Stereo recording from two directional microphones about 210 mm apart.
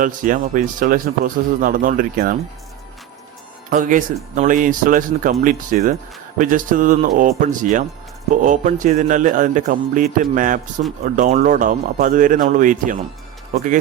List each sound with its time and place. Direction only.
0.0 s speech: 40° right (ahead or behind)
3.7 s speech: 40° right (ahead or behind)